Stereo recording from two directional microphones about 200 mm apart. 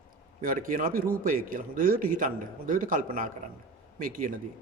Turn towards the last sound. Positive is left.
turn(degrees=-45)  # may be behind; listen again after turning